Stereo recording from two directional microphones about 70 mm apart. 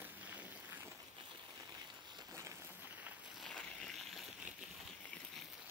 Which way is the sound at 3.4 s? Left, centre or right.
Centre.